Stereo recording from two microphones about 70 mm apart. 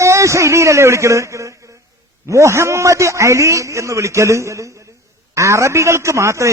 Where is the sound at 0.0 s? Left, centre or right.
Right.